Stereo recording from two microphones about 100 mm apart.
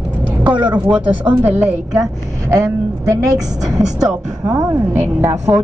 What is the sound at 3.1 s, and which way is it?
A woman's voice, 35° right (ahead or behind).